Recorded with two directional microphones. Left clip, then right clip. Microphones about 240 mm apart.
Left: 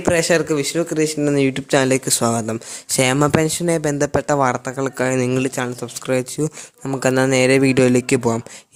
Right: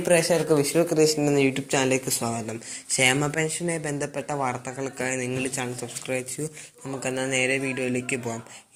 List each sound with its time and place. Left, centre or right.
0.0 s speech: left
1.4 s speech: left
1.7 s speech: left